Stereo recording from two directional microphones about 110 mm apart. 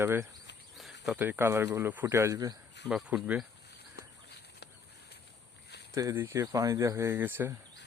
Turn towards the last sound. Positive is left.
turn(degrees=-20)  # may be behind; listen again after turning